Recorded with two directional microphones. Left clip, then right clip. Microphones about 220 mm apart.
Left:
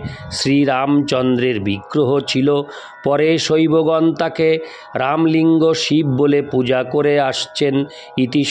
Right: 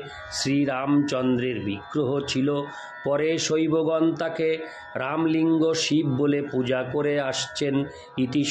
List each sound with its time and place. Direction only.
0.3 s speech: 40° left (ahead or behind)